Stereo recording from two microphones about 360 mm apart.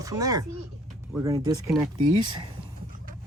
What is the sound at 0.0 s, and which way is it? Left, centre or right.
Speech, centre.